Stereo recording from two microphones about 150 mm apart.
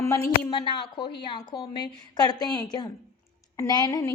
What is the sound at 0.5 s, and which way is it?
A woman's voice, 30° left (ahead or behind).